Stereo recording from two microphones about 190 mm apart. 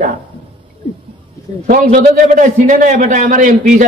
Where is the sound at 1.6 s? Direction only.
45° right (ahead or behind).